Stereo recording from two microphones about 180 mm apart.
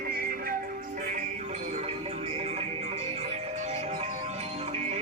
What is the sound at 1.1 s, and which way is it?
Music, 40° right (ahead or behind).